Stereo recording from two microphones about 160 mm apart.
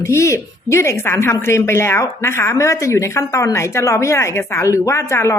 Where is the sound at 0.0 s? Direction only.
15° left (ahead or behind).